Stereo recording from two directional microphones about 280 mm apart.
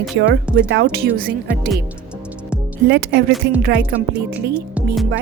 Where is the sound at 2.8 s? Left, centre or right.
Right.